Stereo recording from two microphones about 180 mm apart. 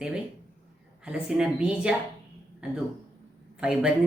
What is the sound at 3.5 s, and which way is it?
Speech, 5° right (ahead or behind).